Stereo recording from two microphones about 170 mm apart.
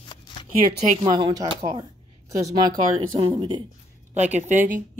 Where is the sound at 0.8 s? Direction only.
40° right (ahead or behind).